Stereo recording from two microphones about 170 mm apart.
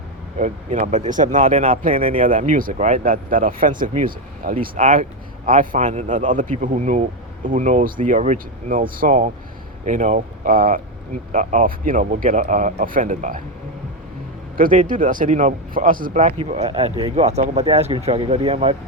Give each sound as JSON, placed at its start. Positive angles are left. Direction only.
{"t": 0.3, "sound": "speech", "side_deg": -45}
{"t": 14.5, "sound": "speech", "side_deg": -55}
{"t": 16.4, "sound": "speech", "side_deg": -40}